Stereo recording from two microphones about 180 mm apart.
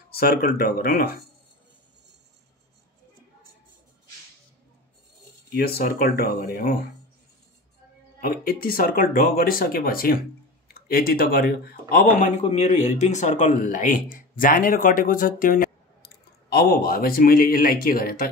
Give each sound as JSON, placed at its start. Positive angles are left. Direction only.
{"t": 0.1, "sound": "a man's voice", "side_deg": 60}
{"t": 5.5, "sound": "a man's voice", "side_deg": 60}
{"t": 8.2, "sound": "a man's voice", "side_deg": 55}